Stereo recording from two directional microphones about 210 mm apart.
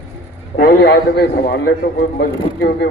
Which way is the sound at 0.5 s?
50° left (ahead or behind).